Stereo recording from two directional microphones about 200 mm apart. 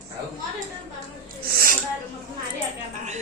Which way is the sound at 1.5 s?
45° right (ahead or behind).